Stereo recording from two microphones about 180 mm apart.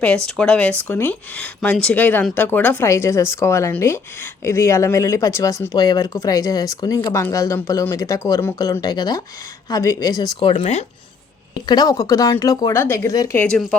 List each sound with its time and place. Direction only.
0.3 s speech: 5° left (ahead or behind); by 10.5 s 20° left (ahead or behind)
10.5 s speech: 35° left (ahead or behind)
11.5 s speech: 25° left (ahead or behind)